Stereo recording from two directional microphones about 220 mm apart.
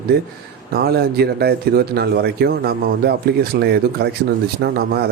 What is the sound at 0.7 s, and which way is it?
Speech, 45° right (ahead or behind).